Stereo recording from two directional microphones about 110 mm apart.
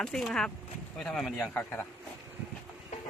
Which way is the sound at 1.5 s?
15° left (ahead or behind).